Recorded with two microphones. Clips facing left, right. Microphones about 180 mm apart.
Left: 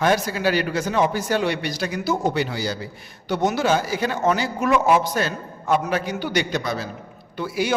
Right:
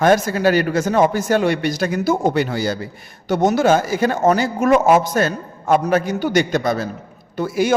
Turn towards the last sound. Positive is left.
turn(degrees=-45)  # may be behind; listen again after turning